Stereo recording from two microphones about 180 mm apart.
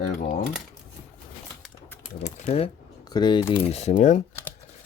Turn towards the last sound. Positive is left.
turn(degrees=40)  # may be behind; listen again after turning